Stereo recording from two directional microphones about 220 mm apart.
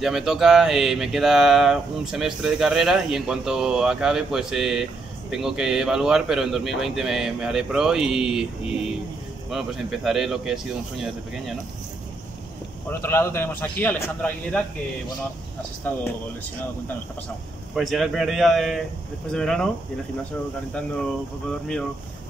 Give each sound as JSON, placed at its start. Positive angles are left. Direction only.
{"t": 0.0, "sound": "speech", "side_deg": 0}
{"t": 9.5, "sound": "speech", "side_deg": 0}
{"t": 13.0, "sound": "a man's voice", "side_deg": 10}
{"t": 15.8, "sound": "a man's voice", "side_deg": 5}
{"t": 17.7, "sound": "speech", "side_deg": 0}
{"t": 21.5, "sound": "speech", "side_deg": 5}